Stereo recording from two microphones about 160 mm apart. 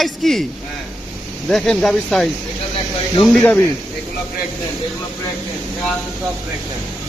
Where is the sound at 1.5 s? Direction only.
5° left (ahead or behind).